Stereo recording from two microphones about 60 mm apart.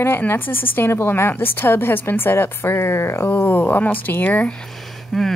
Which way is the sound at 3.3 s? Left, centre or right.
Left.